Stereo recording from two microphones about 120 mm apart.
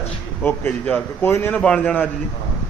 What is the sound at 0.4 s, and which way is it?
A man's voice, 10° left (ahead or behind).